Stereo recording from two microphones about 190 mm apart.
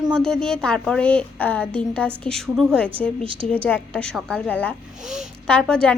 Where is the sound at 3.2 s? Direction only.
30° right (ahead or behind).